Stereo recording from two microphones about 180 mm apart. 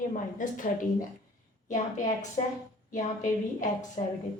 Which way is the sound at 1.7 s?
45° left (ahead or behind).